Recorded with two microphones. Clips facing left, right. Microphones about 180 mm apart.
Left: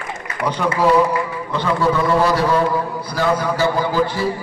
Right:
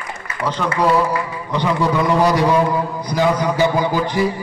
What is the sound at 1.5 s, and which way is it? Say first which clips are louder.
A man's voice: even; 15° right (ahead or behind).